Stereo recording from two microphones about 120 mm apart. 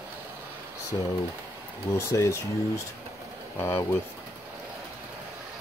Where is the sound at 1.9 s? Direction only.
25° left (ahead or behind).